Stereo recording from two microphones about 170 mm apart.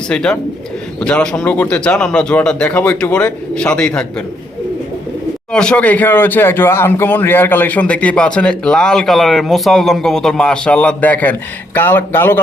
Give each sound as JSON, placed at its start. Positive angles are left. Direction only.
{"t": 0.1, "sound": "speech", "side_deg": 5}
{"t": 5.5, "sound": "speech", "side_deg": 5}